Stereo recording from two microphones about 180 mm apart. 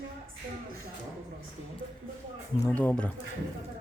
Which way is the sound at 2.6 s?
10° left (ahead or behind).